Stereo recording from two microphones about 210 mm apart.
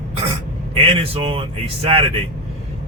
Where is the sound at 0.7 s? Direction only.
25° right (ahead or behind).